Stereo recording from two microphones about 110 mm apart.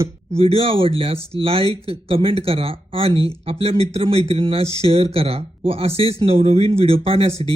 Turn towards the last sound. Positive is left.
turn(degrees=-65)  # may be behind; listen again after turning